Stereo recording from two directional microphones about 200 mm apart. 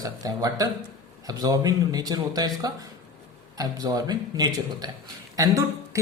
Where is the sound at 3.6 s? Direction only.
20° right (ahead or behind).